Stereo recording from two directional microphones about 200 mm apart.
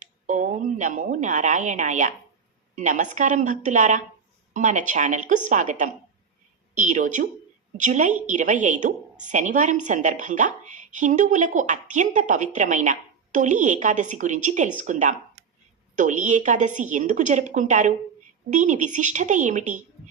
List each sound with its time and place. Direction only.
0.0 s a woman's voice: 40° right (ahead or behind)